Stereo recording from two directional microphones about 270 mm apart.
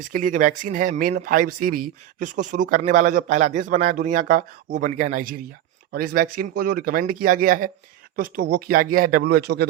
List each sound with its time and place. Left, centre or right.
0.1 s a man's voice: right